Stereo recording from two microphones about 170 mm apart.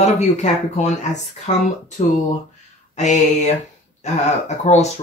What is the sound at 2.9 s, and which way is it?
Mantra, 45° left (ahead or behind).